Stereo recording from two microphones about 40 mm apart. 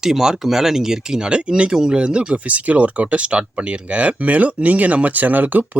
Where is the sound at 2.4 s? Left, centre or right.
Right.